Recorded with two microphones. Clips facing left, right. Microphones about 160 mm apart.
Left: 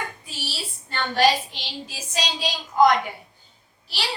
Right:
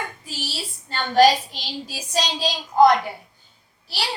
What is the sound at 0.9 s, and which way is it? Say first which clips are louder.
A woman's voice: right 4 dB; 35° right (ahead or behind).